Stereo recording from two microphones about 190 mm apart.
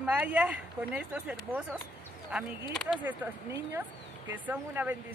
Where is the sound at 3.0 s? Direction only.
10° right (ahead or behind).